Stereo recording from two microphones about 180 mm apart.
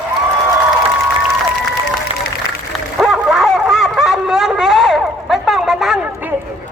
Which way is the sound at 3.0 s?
5° right (ahead or behind).